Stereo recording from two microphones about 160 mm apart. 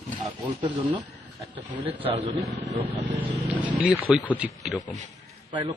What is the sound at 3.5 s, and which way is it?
Vehicle, 10° right (ahead or behind).